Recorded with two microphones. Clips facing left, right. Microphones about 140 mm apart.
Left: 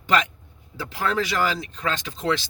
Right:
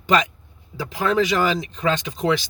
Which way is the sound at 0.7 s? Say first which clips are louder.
Right 5 dB; 15° right (ahead or behind).